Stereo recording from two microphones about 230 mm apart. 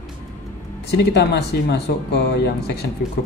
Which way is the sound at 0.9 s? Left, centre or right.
Left.